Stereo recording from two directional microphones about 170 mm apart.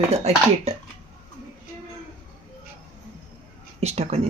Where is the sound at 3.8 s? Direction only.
35° right (ahead or behind).